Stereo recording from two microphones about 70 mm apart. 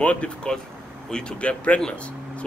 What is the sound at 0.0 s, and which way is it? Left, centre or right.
Speech, centre.